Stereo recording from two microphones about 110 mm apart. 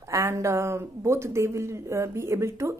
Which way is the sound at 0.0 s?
30° right (ahead or behind).